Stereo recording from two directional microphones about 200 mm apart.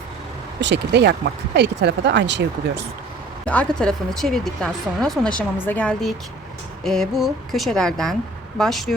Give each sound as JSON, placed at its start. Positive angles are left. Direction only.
{"t": 0.6, "sound": "speech", "side_deg": -60}
{"t": 3.4, "sound": "speech", "side_deg": 5}